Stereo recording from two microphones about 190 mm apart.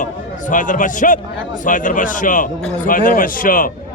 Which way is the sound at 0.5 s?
45° left (ahead or behind).